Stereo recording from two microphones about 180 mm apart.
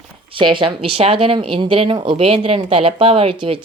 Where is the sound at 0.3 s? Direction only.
30° right (ahead or behind).